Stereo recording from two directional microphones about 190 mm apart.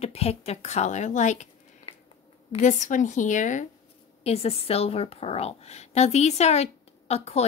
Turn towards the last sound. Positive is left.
turn(degrees=35)  # may be behind; listen again after turning